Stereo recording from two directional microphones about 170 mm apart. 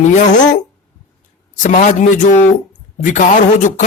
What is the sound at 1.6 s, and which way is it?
Speech, 45° left (ahead or behind).